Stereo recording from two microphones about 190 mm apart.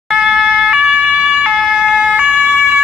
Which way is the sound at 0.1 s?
5° right (ahead or behind).